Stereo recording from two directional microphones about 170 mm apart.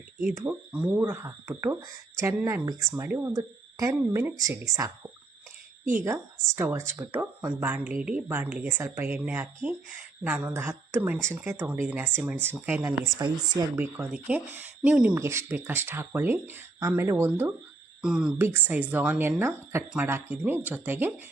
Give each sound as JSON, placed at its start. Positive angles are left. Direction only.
{"t": 0.3, "sound": "speech", "side_deg": -5}
{"t": 5.8, "sound": "a woman's voice", "side_deg": -50}
{"t": 6.1, "sound": "speech", "side_deg": -15}
{"t": 13.7, "sound": "speech", "side_deg": -10}